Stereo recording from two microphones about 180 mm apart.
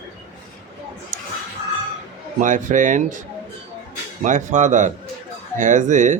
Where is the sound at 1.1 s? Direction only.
50° right (ahead or behind).